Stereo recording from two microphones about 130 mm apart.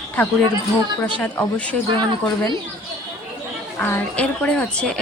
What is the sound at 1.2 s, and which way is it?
Speech, 10° left (ahead or behind).